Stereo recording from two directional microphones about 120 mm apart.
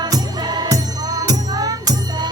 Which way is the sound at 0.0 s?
35° right (ahead or behind).